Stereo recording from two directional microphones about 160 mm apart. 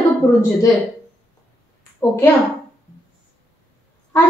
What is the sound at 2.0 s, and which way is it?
Speech, 15° left (ahead or behind).